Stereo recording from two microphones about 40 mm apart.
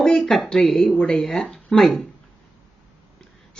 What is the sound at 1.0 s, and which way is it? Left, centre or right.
Speech, left.